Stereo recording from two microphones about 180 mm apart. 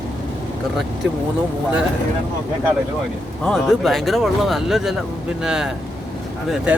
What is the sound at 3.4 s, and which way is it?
Speech, centre (ahead or behind).